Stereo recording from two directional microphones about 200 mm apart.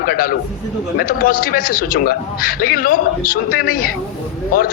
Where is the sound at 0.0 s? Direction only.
45° left (ahead or behind).